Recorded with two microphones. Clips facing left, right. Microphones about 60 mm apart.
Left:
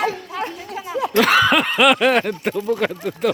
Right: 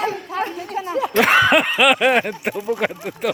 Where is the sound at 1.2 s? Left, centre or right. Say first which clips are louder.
Right 1 dB; right.